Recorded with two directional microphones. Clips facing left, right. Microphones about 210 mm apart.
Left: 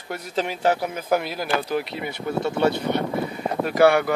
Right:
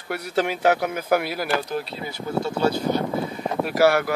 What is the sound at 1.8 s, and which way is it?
Speech, 65° left (ahead or behind).